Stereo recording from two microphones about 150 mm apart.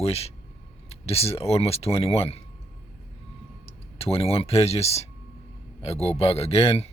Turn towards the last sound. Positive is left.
turn(degrees=40)  # may be behind; listen again after turning